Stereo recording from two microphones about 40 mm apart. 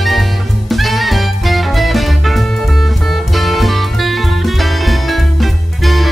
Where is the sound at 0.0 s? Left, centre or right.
Centre.